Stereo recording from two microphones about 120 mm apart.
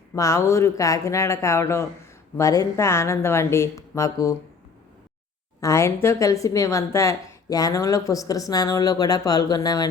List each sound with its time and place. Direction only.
0.1 s a woman's voice: 25° left (ahead or behind)
5.5 s a woman's voice: 25° left (ahead or behind)